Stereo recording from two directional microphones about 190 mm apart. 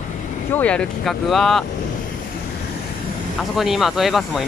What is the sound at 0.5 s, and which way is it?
Speech, 10° left (ahead or behind).